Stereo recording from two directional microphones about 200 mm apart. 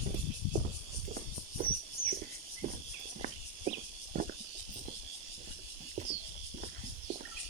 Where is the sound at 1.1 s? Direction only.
45° right (ahead or behind).